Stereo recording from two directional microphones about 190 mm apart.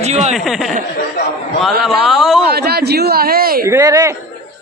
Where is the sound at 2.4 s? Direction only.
55° right (ahead or behind).